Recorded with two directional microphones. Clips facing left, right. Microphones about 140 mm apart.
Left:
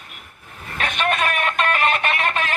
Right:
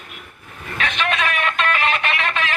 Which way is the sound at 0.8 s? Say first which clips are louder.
Left 1 dB; 45° left (ahead or behind).